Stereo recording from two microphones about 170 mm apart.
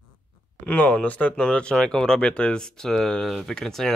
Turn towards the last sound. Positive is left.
turn(degrees=0)  # may be behind; listen again after turning